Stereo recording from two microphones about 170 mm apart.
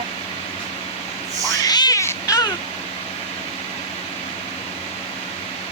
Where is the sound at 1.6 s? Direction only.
25° left (ahead or behind).